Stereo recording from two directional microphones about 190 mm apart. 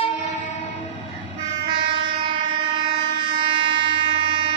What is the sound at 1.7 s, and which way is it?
Train, 25° right (ahead or behind).